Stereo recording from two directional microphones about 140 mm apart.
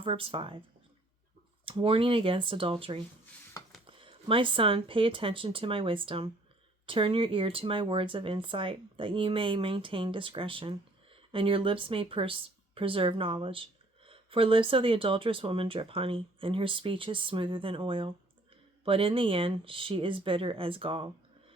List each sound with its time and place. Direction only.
0.0 s speech: 40° right (ahead or behind)
1.6 s speech: 40° right (ahead or behind)